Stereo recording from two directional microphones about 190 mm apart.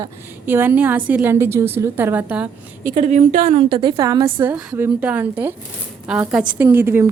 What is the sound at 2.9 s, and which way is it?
Speech, 35° right (ahead or behind).